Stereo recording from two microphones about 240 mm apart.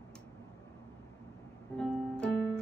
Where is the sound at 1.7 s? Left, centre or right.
Centre.